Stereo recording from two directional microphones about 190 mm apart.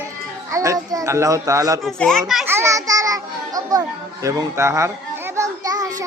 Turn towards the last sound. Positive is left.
turn(degrees=-20)  # may be behind; listen again after turning